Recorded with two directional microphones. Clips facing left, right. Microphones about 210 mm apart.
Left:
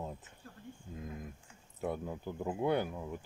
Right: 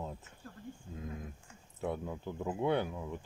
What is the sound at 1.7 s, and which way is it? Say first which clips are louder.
Speech: even; 5° left (ahead or behind).